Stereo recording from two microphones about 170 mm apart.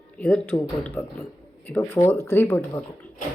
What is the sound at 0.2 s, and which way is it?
Speech, 10° left (ahead or behind).